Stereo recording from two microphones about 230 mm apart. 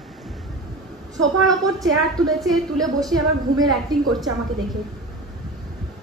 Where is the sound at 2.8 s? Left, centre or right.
Centre.